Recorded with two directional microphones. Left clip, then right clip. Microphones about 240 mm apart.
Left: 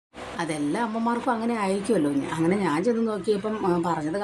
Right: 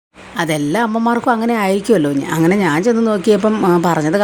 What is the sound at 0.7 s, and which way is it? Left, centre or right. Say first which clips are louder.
A woman's voice: right 10 dB; right.